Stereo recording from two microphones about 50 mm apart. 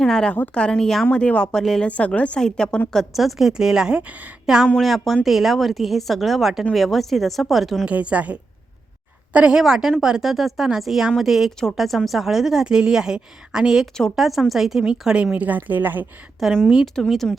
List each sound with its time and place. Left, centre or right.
0.0 s a woman's voice: centre
1.5 s a woman's voice: centre
1.8 s a woman's voice: left
2.9 s a woman's voice: centre
4.8 s a woman's voice: centre
7.9 s a woman's voice: right
9.6 s a woman's voice: centre; by 16.0 s right
16.4 s a woman's voice: centre
16.8 s a woman's voice: centre